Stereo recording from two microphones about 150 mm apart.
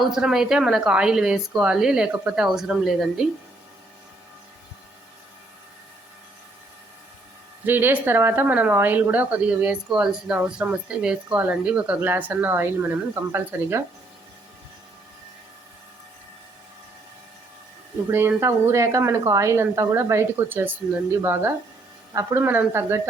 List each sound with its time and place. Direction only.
0.0 s a woman's voice: 5° right (ahead or behind)
7.6 s speech: 15° right (ahead or behind)
18.1 s speech: 15° right (ahead or behind)